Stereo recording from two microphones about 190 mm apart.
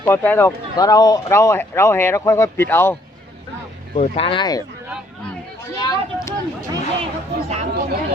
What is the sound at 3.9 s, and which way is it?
Speech, 30° left (ahead or behind).